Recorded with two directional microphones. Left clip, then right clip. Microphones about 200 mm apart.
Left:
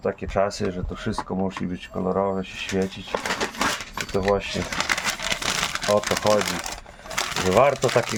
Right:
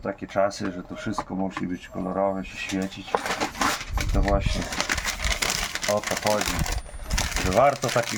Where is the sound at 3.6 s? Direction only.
30° left (ahead or behind).